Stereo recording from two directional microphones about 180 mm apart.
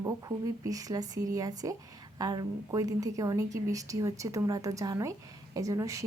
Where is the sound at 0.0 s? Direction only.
20° right (ahead or behind).